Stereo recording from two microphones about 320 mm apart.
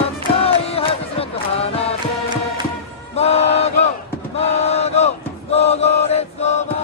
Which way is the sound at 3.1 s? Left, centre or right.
Centre.